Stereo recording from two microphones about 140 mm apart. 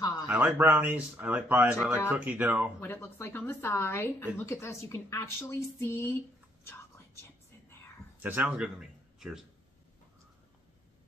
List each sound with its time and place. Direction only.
0.3 s speech: 10° right (ahead or behind)
2.8 s a woman's voice: 15° left (ahead or behind)
8.2 s speech: 10° right (ahead or behind)